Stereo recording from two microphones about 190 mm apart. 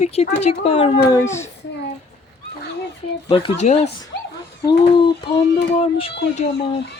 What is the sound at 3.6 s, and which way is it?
Speech, 35° left (ahead or behind).